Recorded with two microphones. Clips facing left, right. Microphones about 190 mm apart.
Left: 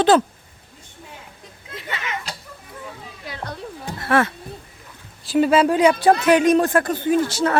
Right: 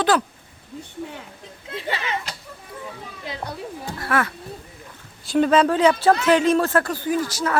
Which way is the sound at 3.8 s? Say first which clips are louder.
Left 4 dB; 25° left (ahead or behind).